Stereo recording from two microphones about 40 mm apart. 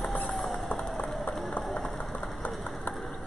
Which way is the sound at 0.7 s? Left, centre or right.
Centre.